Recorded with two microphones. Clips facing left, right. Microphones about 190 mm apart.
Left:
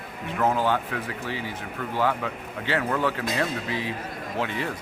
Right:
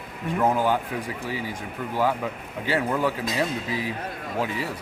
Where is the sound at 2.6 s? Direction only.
10° right (ahead or behind).